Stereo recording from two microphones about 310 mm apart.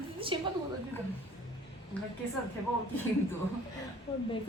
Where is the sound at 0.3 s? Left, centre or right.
Centre.